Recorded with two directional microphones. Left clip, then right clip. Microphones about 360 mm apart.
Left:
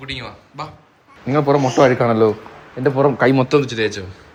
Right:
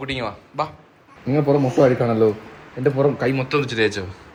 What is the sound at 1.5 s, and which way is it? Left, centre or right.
A man's voice, centre.